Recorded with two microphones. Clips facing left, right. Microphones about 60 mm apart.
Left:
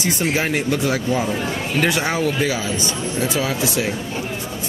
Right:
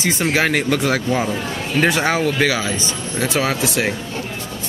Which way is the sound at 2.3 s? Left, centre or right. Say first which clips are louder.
Right 2 dB; right.